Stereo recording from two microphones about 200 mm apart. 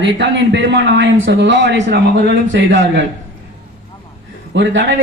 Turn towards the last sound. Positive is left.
turn(degrees=-65)  # may be behind; listen again after turning